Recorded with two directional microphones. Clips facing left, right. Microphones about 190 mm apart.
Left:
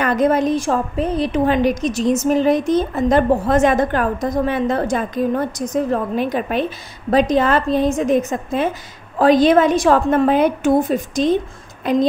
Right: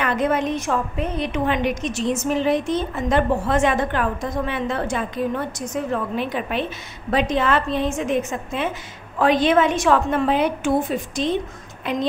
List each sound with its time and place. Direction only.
0.0 s a woman's voice: 40° left (ahead or behind)